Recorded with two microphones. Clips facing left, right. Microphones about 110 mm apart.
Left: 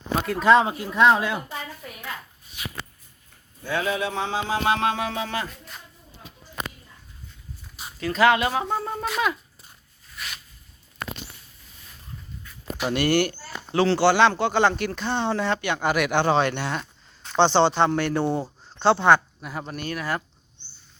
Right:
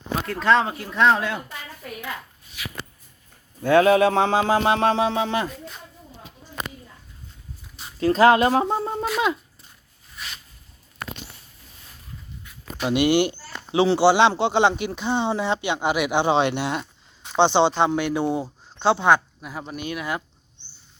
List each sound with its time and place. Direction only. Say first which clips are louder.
0.3 s speech: left 2 dB; 10° left (ahead or behind)
3.6 s a sound: right 11 dB; 60° right (ahead or behind)
4.6 s music: right 4 dB; 30° right (ahead or behind)
7.9 s speech: right 4 dB; 35° right (ahead or behind)
8.6 s music: right 3 dB; 25° right (ahead or behind)
12.9 s music: right 3 dB; 20° right (ahead or behind)
13.7 s speech: right 2 dB; 20° right (ahead or behind)
19.8 s speech: even; 15° right (ahead or behind)